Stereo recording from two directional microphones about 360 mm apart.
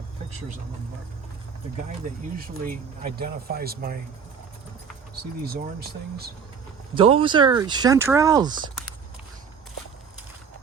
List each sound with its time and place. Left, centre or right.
2.0 s speech: centre
6.9 s speech: centre